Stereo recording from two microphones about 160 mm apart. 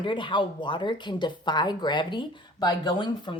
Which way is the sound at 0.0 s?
30° left (ahead or behind).